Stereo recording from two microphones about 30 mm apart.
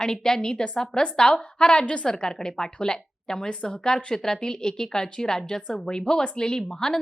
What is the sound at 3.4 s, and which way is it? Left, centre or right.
Speech, left.